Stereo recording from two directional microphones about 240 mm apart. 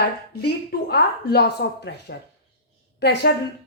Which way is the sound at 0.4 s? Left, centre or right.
Left.